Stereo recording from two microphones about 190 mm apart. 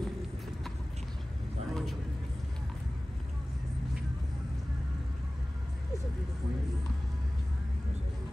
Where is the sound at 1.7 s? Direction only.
Centre (ahead or behind).